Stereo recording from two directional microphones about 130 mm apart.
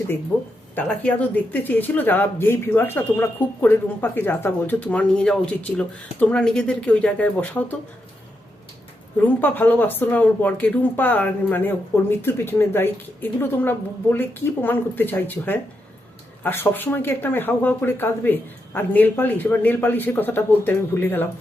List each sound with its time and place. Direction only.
0.3 s speech: 10° left (ahead or behind)
9.2 s speech: 15° left (ahead or behind)